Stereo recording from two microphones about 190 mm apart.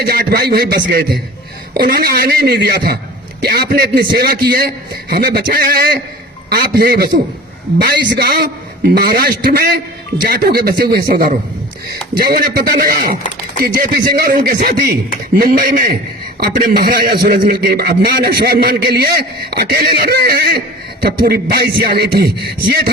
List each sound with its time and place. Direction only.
0.0 s a man's voice: 50° right (ahead or behind)